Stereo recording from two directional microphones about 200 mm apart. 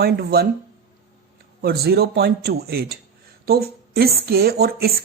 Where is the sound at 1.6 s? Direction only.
50° right (ahead or behind).